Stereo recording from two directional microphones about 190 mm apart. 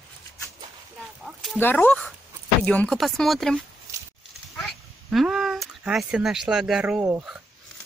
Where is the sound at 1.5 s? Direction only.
10° left (ahead or behind).